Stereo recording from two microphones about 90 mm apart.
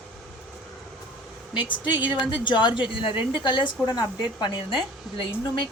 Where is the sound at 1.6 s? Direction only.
60° left (ahead or behind).